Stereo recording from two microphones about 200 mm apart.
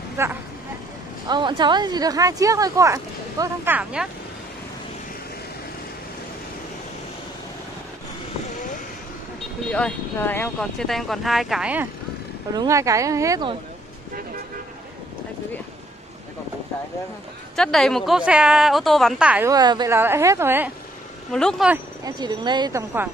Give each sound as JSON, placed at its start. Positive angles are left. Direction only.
{"t": 0.2, "sound": "speech", "side_deg": -15}
{"t": 9.7, "sound": "speech", "side_deg": 5}
{"t": 17.6, "sound": "speech", "side_deg": 0}
{"t": 19.5, "sound": "speech", "side_deg": -20}
{"t": 21.3, "sound": "speech", "side_deg": 5}
{"t": 22.0, "sound": "a woman's voice", "side_deg": -20}